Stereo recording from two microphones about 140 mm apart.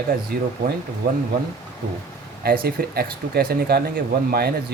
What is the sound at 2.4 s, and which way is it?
Speech, 90° right.